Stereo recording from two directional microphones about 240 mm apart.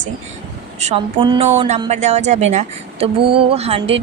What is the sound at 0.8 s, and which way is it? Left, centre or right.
A woman's voice, right.